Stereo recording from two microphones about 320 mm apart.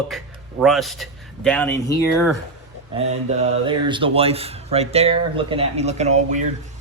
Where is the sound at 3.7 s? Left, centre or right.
Centre.